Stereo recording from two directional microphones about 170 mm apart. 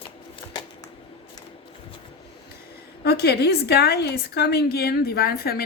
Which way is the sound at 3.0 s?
70° left (ahead or behind).